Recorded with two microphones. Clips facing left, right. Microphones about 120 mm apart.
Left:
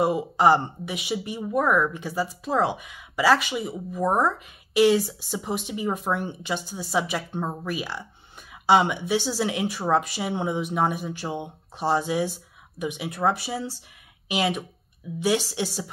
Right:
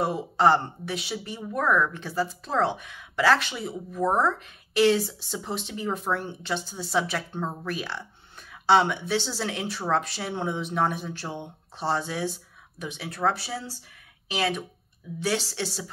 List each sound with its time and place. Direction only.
0.0 s a woman's voice: 10° left (ahead or behind)